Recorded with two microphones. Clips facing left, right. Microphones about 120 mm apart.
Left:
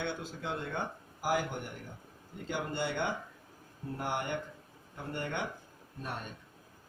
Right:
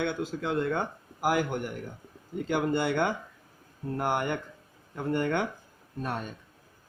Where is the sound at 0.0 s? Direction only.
90° right.